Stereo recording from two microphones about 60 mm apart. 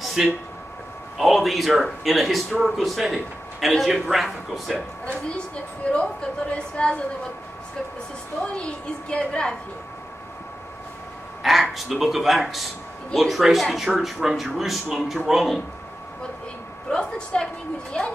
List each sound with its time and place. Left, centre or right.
0.2 s speech: centre
5.8 s a woman's voice: centre
9.1 s a woman's voice: centre
11.4 s speech: centre
16.9 s a woman's voice: centre